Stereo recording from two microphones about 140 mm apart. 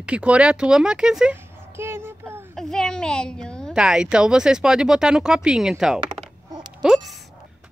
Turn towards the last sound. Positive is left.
turn(degrees=-5)  # may be behind; listen again after turning